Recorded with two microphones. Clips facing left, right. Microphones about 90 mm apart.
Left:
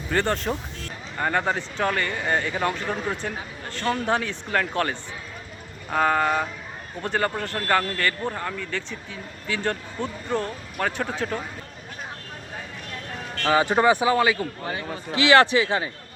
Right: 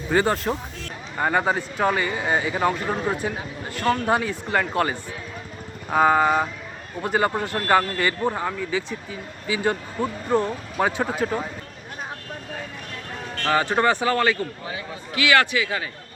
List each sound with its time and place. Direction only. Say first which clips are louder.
0.1 s a man's voice: right 3 dB; 5° right (ahead or behind)
13.4 s speech: left 1 dB; 15° left (ahead or behind)
15.1 s speech: left 3 dB; 30° left (ahead or behind)